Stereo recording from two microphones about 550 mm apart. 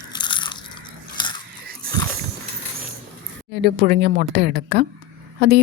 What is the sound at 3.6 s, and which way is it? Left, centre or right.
A woman's voice, centre.